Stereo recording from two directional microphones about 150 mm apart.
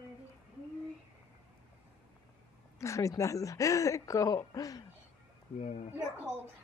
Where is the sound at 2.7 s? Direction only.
20° left (ahead or behind).